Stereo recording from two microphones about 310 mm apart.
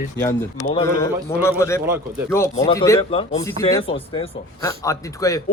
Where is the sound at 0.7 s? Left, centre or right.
Centre.